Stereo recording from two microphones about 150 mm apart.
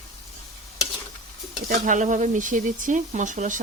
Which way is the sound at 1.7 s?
60° right (ahead or behind).